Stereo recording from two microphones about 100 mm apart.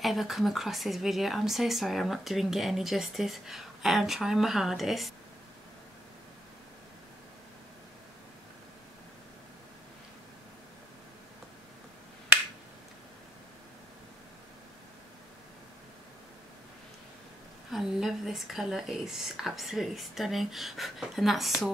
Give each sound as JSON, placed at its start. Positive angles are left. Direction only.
{"t": 0.0, "sound": "speech", "side_deg": 0}
{"t": 17.6, "sound": "speech", "side_deg": -5}